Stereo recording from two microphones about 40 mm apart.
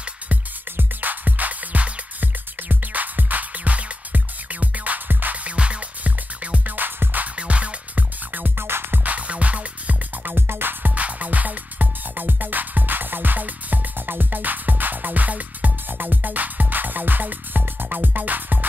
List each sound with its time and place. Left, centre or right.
0.7 s music: right
5.4 s music: right
7.3 s music: right
8.5 s music: right
9.0 s music: right
10.2 s music: right
11.0 s music: right
15.9 s music: right